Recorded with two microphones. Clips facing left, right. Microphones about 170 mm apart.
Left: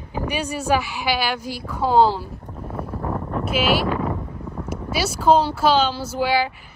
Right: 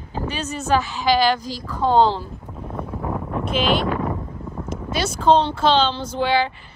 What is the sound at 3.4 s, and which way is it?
Speech, 5° left (ahead or behind).